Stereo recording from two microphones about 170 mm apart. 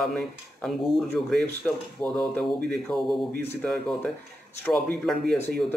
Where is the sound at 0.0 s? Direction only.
Centre (ahead or behind).